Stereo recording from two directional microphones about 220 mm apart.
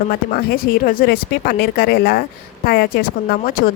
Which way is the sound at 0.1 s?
40° left (ahead or behind).